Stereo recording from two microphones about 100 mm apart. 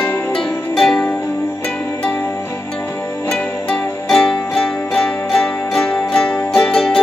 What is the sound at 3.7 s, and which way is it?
Music, 5° left (ahead or behind).